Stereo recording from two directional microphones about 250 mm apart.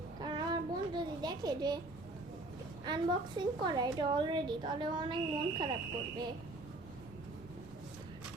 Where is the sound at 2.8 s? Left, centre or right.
Centre.